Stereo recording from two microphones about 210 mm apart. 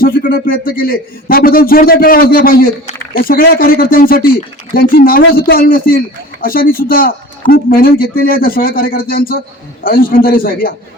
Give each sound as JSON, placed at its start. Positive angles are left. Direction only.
{"t": 0.3, "sound": "a man's voice", "side_deg": 45}